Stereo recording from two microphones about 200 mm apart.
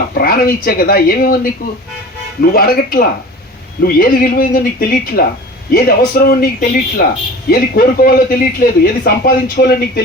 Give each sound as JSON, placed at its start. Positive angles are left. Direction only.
{"t": 0.1, "sound": "speech", "side_deg": 50}
{"t": 2.5, "sound": "speech", "side_deg": 45}